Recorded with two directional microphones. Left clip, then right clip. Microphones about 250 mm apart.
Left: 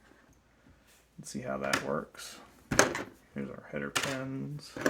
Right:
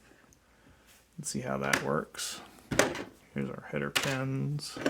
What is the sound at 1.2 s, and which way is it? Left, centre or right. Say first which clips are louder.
Speech: right 2 dB; right.